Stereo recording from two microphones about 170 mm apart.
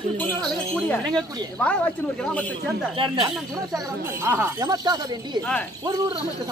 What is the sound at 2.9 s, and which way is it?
Speech, 30° right (ahead or behind).